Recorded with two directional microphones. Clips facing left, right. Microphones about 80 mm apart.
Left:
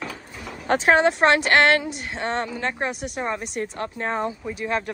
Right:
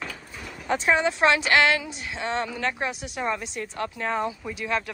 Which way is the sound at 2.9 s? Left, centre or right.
Left.